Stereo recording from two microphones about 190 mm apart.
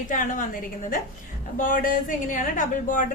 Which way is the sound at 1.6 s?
45° left (ahead or behind).